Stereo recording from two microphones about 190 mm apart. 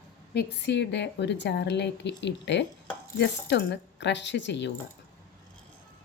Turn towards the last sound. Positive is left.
turn(degrees=70)  # may be behind; listen again after turning